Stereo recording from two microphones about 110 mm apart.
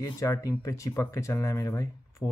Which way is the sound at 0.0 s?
30° left (ahead or behind).